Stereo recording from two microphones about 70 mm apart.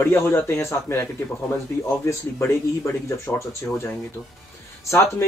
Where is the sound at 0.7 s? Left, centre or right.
Left.